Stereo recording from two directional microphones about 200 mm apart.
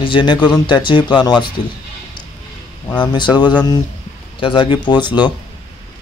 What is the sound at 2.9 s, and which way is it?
Speech, 20° left (ahead or behind).